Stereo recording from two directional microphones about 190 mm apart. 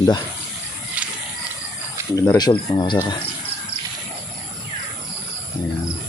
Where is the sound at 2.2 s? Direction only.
20° left (ahead or behind).